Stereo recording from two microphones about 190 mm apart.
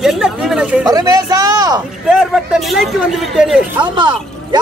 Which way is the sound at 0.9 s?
20° right (ahead or behind).